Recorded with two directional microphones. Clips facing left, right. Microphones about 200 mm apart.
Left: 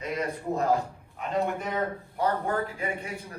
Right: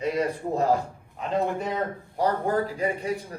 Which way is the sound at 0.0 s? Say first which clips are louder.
Right 5 dB; 30° right (ahead or behind).